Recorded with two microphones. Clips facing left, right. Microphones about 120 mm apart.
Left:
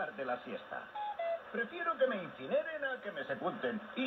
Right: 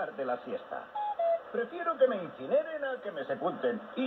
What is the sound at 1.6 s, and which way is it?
Speech, 25° right (ahead or behind).